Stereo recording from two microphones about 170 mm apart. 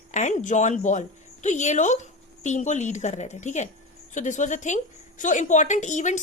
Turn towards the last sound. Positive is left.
turn(degrees=45)  # may be behind; listen again after turning